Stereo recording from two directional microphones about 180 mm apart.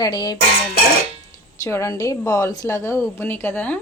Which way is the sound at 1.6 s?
15° left (ahead or behind).